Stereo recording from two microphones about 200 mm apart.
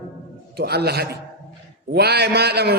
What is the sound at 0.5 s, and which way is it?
A man's voice, 55° right (ahead or behind).